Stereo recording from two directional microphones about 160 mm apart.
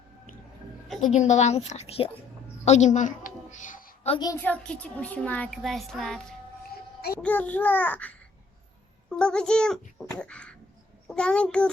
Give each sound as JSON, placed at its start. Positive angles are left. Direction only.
{"t": 1.0, "sound": "a woman's voice", "side_deg": 50}
{"t": 4.4, "sound": "a child's voice", "side_deg": 10}